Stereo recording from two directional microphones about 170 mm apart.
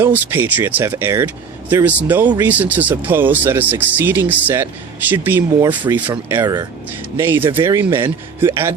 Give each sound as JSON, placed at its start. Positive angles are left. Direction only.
{"t": 0.0, "sound": "speech", "side_deg": -10}
{"t": 6.4, "sound": "speech", "side_deg": -25}
{"t": 7.2, "sound": "speech", "side_deg": -15}